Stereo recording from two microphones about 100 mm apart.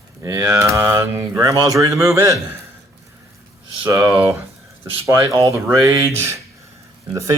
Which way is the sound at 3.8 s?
30° right (ahead or behind).